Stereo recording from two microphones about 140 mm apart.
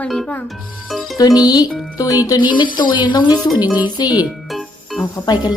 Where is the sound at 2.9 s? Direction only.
35° left (ahead or behind).